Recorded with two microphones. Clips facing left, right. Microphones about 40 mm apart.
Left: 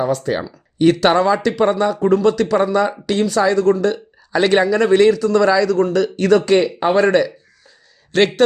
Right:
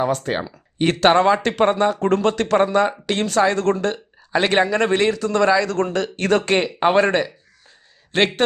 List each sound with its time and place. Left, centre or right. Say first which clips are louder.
0.0 s a man's voice: left 2 dB; right